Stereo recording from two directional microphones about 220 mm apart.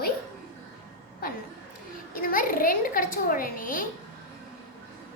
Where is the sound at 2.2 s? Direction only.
40° left (ahead or behind).